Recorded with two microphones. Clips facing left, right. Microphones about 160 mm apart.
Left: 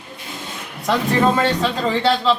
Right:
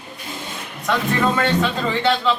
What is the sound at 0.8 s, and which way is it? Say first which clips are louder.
Speech: left 3 dB; 30° left (ahead or behind).